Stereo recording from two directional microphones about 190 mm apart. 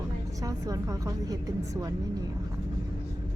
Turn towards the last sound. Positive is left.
turn(degrees=-20)  # may be behind; listen again after turning